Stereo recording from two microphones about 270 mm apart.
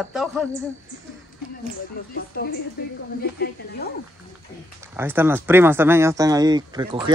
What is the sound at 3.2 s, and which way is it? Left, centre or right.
Speech, left.